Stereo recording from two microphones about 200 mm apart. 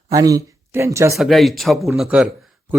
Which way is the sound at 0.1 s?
15° right (ahead or behind).